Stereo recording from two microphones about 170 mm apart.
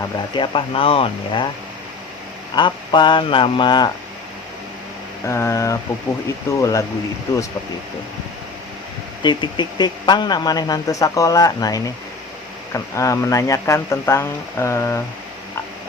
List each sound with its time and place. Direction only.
0.3 s speech: 30° left (ahead or behind)
2.6 s speech: 25° left (ahead or behind)
5.2 s speech: 15° left (ahead or behind)
9.2 s speech: 25° left (ahead or behind)